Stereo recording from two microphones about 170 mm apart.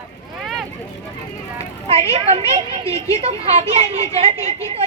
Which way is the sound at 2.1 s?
35° right (ahead or behind).